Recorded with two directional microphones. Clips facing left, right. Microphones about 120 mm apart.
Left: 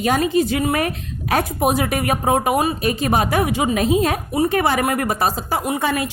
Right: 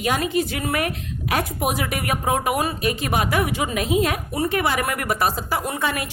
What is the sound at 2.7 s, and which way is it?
A woman's voice, 35° left (ahead or behind).